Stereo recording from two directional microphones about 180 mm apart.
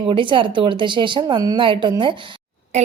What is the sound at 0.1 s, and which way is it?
Speech, 30° right (ahead or behind).